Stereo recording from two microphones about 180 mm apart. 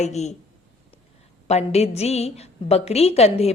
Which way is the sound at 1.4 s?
35° left (ahead or behind).